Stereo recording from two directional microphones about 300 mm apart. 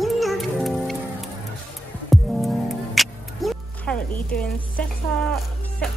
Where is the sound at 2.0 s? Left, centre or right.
Centre.